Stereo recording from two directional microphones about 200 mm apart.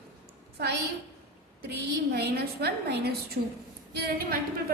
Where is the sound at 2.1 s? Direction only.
55° right (ahead or behind).